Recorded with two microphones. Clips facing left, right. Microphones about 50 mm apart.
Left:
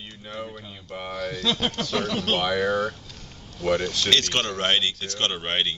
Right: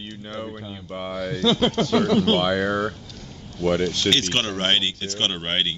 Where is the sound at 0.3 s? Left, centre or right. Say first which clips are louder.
Right 2 dB; centre.